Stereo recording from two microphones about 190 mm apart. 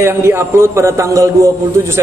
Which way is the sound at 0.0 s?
15° right (ahead or behind).